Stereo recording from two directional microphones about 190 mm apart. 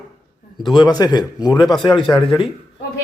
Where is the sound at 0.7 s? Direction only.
20° left (ahead or behind).